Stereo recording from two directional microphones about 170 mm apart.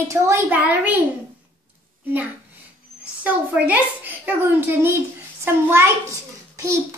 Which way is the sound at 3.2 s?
10° right (ahead or behind).